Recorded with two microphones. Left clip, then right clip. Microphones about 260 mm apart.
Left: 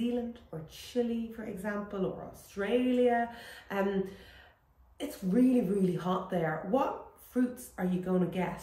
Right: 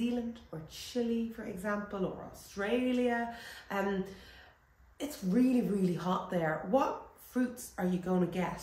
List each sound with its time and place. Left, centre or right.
0.1 s a woman's voice: centre
4.9 s a woman's voice: centre